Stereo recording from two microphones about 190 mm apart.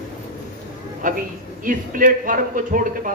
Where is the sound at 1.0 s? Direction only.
45° right (ahead or behind).